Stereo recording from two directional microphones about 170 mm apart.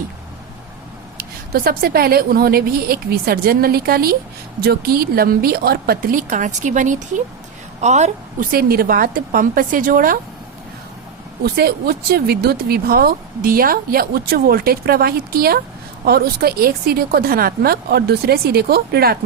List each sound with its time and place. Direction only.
1.5 s a woman's voice: 60° right (ahead or behind); by 8.4 s 40° right (ahead or behind)
8.5 s speech: 60° right (ahead or behind)
11.4 s speech: 65° right (ahead or behind)